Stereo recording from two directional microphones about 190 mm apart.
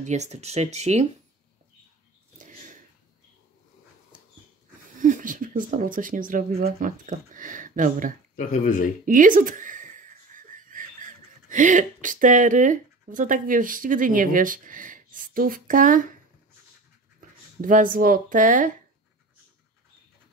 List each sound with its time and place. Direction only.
0.0 s speech: 35° right (ahead or behind)
2.3 s a sound: 40° right (ahead or behind)
4.9 s speech: 45° right (ahead or behind)
8.4 s speech: 40° left (ahead or behind)
9.0 s speech: 45° right (ahead or behind)
17.2 s speech: 45° right (ahead or behind)